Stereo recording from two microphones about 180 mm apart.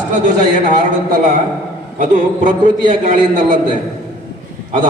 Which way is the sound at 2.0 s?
45° right (ahead or behind).